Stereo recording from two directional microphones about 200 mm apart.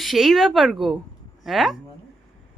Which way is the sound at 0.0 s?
Centre (ahead or behind).